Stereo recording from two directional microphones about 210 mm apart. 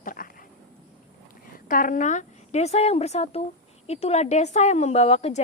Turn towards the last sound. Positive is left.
turn(degrees=30)  # may be behind; listen again after turning